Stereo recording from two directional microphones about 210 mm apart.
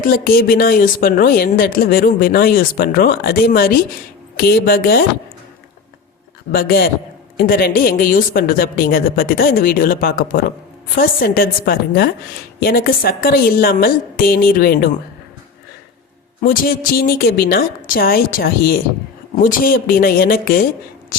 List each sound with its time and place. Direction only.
0.0 s speech: 45° left (ahead or behind)
6.5 s speech: 45° left (ahead or behind)
16.4 s speech: 45° left (ahead or behind)